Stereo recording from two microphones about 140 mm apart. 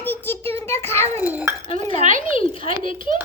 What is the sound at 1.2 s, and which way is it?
Dishes, 15° right (ahead or behind).